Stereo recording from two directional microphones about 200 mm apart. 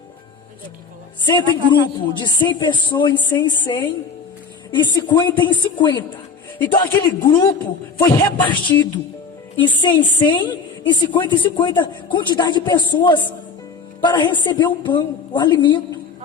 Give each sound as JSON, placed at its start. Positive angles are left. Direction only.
{"t": 1.2, "sound": "a woman's voice", "side_deg": 25}
{"t": 8.0, "sound": "speech", "side_deg": 10}
{"t": 9.6, "sound": "a woman's voice", "side_deg": 25}